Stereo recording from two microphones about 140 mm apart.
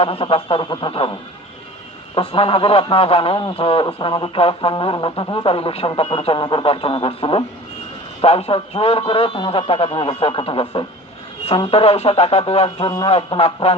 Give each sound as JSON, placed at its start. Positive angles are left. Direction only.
{"t": 0.0, "sound": "a man's voice", "side_deg": 45}
{"t": 2.1, "sound": "a man's voice", "side_deg": 40}